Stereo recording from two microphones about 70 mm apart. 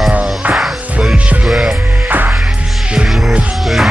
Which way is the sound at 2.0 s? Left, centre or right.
Right.